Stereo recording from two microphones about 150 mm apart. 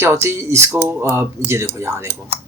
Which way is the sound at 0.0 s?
15° right (ahead or behind).